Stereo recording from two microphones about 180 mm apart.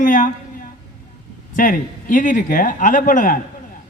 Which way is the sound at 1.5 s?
50° left (ahead or behind).